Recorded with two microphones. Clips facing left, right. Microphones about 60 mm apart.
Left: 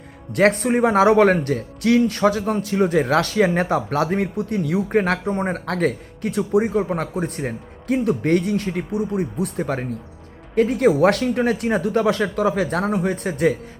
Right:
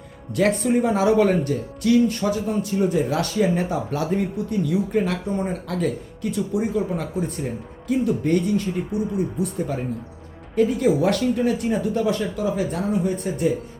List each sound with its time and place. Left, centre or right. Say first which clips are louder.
0.3 s speech: left 3 dB; left